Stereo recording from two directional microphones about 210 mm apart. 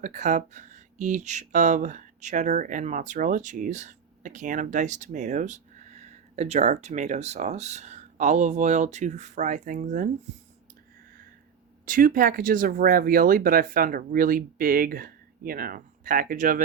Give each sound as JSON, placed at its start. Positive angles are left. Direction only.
{"t": 0.0, "sound": "speech", "side_deg": -35}
{"t": 11.9, "sound": "speech", "side_deg": -40}